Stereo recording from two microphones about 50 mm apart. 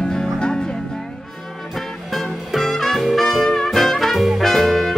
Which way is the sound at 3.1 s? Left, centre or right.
Centre.